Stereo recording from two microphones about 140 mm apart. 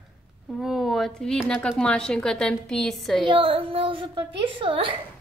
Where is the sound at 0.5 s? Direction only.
Centre (ahead or behind).